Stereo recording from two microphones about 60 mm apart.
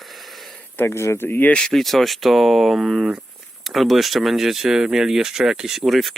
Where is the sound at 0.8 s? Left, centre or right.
Left.